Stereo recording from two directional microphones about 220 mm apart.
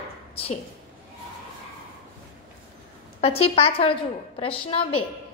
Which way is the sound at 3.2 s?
25° left (ahead or behind).